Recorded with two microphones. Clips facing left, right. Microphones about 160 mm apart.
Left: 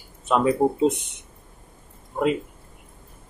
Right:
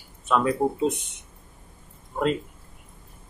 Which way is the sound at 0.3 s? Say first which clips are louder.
Left 3 dB; 20° left (ahead or behind).